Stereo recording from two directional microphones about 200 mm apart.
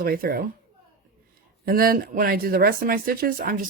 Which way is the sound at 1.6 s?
45° right (ahead or behind).